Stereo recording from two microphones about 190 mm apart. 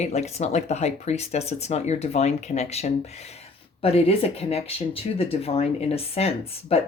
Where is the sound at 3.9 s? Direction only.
30° left (ahead or behind).